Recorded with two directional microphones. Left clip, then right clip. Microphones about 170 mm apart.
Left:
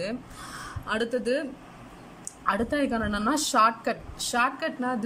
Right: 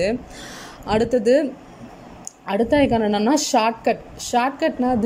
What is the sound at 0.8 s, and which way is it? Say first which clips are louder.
Speech: right 10 dB; 25° right (ahead or behind).